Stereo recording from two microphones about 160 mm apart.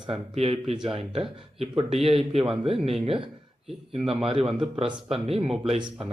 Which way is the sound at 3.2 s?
35° right (ahead or behind).